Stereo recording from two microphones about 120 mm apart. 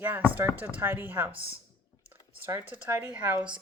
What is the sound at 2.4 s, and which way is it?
Speech, 15° right (ahead or behind).